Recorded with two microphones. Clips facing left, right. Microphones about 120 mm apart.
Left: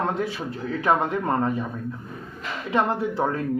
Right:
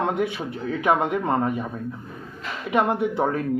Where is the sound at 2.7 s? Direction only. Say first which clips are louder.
Right 2 dB; 20° right (ahead or behind).